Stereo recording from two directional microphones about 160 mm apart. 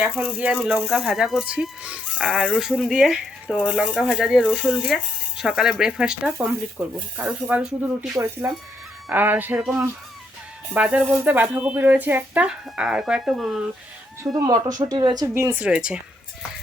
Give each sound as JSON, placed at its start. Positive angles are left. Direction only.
{"t": 0.2, "sound": "speech", "side_deg": -10}
{"t": 0.5, "sound": "speech", "side_deg": 0}
{"t": 8.2, "sound": "speech", "side_deg": -15}
{"t": 14.3, "sound": "speech", "side_deg": -25}